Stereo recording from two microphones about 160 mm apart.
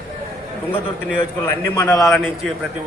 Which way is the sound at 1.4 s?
15° left (ahead or behind).